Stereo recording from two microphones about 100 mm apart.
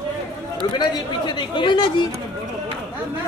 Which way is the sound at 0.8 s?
50° left (ahead or behind).